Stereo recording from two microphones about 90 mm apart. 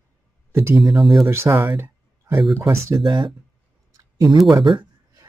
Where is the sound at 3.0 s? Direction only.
65° right (ahead or behind).